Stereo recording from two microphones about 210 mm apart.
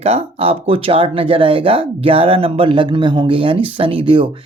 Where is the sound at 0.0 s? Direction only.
30° right (ahead or behind).